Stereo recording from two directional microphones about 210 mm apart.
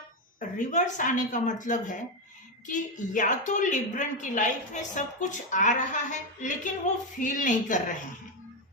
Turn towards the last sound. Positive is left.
turn(degrees=35)  # may be behind; listen again after turning